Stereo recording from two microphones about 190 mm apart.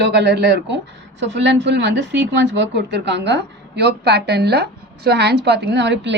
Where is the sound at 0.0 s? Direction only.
65° right (ahead or behind).